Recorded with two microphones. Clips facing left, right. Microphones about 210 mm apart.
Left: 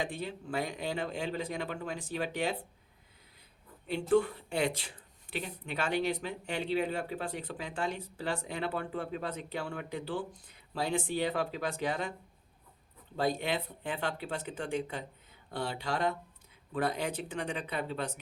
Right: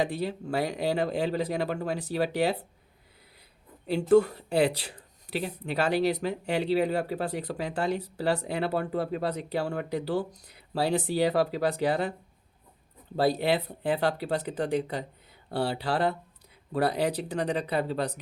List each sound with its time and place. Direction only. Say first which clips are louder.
0.0 s speech: right 7 dB; 40° right (ahead or behind)
3.8 s speech: right 6 dB; 40° right (ahead or behind)
13.1 s speech: right 7 dB; 35° right (ahead or behind)